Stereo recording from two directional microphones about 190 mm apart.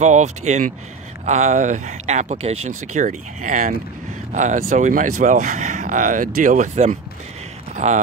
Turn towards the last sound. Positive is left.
turn(degrees=-40)  # may be behind; listen again after turning